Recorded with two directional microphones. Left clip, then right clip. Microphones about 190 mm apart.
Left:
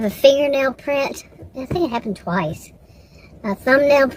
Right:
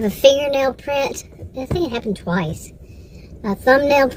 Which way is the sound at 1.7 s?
25° left (ahead or behind).